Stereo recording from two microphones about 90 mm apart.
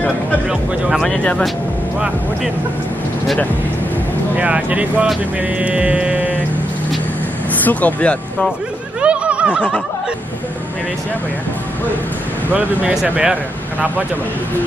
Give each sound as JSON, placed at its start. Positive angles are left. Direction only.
{"t": 0.5, "sound": "speech", "side_deg": -5}
{"t": 1.0, "sound": "speech", "side_deg": 5}
{"t": 4.4, "sound": "speech", "side_deg": -15}
{"t": 7.6, "sound": "speech", "side_deg": 15}
{"t": 9.0, "sound": "a sound", "side_deg": -15}
{"t": 13.0, "sound": "speech", "side_deg": -15}